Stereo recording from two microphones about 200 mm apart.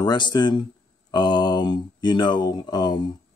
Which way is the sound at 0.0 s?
20° left (ahead or behind).